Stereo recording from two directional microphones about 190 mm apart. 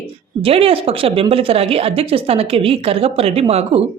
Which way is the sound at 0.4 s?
30° right (ahead or behind).